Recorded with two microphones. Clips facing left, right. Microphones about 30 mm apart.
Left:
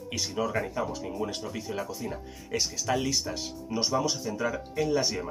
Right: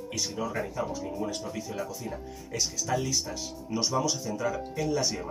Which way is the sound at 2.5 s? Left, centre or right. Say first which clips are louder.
Left 1 dB; left.